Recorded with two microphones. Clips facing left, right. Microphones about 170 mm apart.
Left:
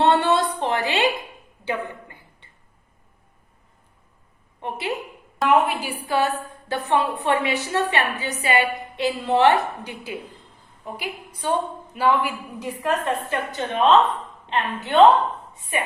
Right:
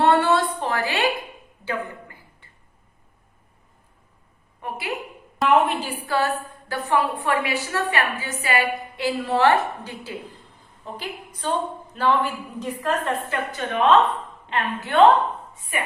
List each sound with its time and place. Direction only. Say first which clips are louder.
0.0 s a sound: even; 20° left (ahead or behind)
4.6 s a woman's voice: left 2 dB; 20° left (ahead or behind)
5.4 s a woman's voice: even; centre (ahead or behind)
5.8 s a woman's voice: left 1 dB; 15° left (ahead or behind)